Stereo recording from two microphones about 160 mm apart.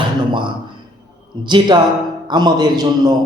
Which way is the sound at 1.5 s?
30° right (ahead or behind).